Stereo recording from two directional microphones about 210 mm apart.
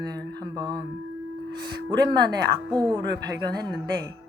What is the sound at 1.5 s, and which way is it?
Speech, 55° right (ahead or behind).